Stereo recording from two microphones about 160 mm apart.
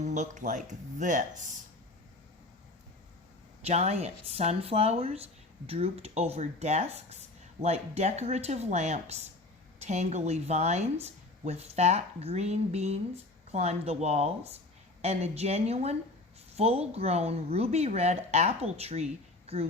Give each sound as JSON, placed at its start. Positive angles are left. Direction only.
{"t": 0.0, "sound": "a woman's voice", "side_deg": -50}
{"t": 3.6, "sound": "a woman's voice", "side_deg": -40}